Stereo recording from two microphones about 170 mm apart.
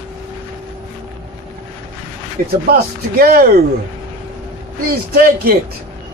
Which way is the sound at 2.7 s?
60° right (ahead or behind).